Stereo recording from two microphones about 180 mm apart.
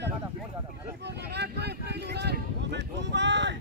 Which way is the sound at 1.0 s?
70° right (ahead or behind).